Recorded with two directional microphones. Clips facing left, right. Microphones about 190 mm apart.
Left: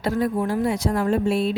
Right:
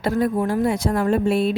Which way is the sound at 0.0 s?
50° right (ahead or behind).